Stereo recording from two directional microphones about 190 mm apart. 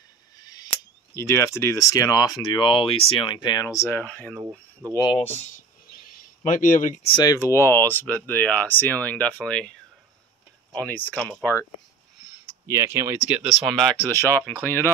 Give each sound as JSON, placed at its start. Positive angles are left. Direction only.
{"t": 0.4, "sound": "a sound", "side_deg": 20}
{"t": 1.1, "sound": "speech", "side_deg": 15}
{"t": 4.9, "sound": "speech", "side_deg": 25}
{"t": 5.9, "sound": "a sound", "side_deg": 50}
{"t": 7.1, "sound": "speech", "side_deg": 20}
{"t": 10.8, "sound": "speech", "side_deg": 10}
{"t": 12.6, "sound": "speech", "side_deg": -15}